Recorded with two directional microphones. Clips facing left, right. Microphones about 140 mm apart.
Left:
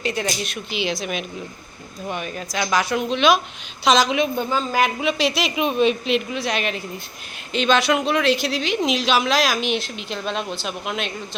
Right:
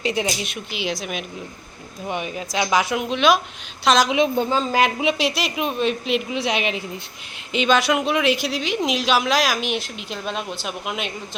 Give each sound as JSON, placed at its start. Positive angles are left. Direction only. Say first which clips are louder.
{"t": 0.0, "sound": "a woman's voice", "louder": "right 2 dB", "side_deg": -20}
{"t": 0.3, "sound": "speech", "louder": "even", "side_deg": -5}
{"t": 2.0, "sound": "speech", "louder": "right 1 dB", "side_deg": -15}
{"t": 4.1, "sound": "a woman's voice", "louder": "right 2 dB", "side_deg": -25}
{"t": 5.5, "sound": "speech", "louder": "left 6 dB", "side_deg": 0}
{"t": 6.3, "sound": "a woman's voice", "louder": "right 1 dB", "side_deg": -20}